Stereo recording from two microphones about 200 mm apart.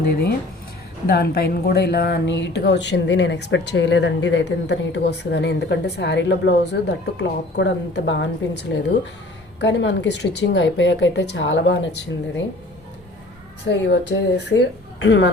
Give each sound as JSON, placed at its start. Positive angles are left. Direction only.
{"t": 1.0, "sound": "speech", "side_deg": 55}
{"t": 13.7, "sound": "speech", "side_deg": 60}